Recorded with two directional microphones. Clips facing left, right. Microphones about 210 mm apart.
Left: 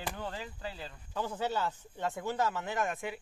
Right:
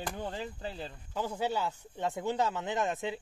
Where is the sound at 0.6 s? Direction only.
30° right (ahead or behind).